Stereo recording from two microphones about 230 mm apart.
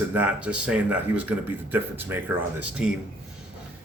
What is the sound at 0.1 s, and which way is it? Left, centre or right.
Speech, centre.